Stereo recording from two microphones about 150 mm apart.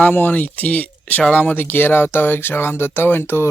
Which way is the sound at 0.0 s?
10° left (ahead or behind).